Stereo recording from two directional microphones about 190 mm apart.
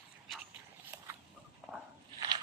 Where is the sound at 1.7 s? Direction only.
10° right (ahead or behind).